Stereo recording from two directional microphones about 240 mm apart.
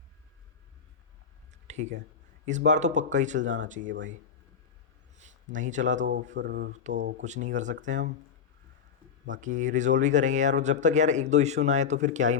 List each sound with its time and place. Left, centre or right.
1.6 s speech: right
5.1 s speech: right
6.3 s mantra: right
6.7 s speech: right
9.2 s speech: right